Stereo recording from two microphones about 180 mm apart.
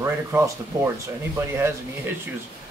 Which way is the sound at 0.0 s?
15° right (ahead or behind).